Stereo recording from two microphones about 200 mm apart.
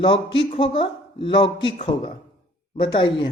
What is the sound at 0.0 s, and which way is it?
Speech, 25° left (ahead or behind).